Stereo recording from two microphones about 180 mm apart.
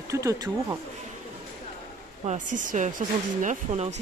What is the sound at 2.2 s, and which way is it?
Speech, 40° right (ahead or behind).